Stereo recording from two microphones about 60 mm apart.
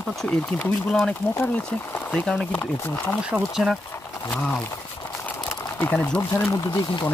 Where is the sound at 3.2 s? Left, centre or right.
Centre.